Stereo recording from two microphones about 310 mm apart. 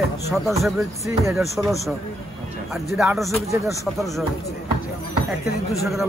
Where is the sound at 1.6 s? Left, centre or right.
Centre.